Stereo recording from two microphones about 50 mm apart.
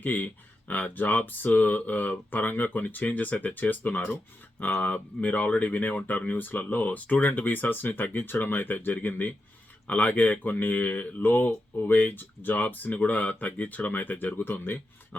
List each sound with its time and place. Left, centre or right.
0.0 s speech: left